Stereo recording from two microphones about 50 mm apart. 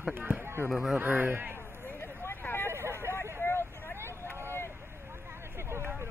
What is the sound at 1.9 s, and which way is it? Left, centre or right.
Vehicle, left.